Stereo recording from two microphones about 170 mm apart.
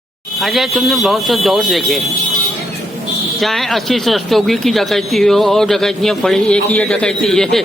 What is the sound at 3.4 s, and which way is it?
Speech, centre (ahead or behind).